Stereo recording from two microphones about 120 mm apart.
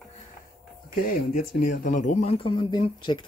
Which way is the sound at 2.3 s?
50° left (ahead or behind).